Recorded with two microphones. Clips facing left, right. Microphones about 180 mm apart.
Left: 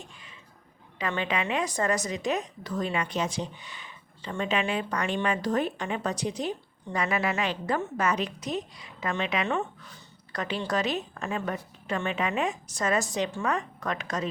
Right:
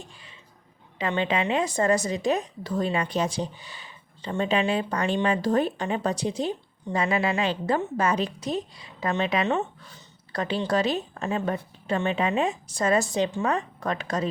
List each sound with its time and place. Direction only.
0.9 s a woman's voice: 30° right (ahead or behind)